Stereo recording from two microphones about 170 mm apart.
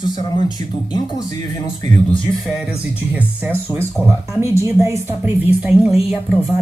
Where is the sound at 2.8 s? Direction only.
10° right (ahead or behind).